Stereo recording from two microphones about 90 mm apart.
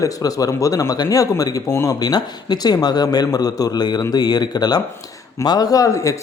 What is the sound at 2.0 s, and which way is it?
Speech, 50° left (ahead or behind).